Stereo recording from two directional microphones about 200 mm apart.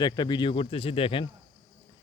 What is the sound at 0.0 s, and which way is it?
Speech, 20° left (ahead or behind).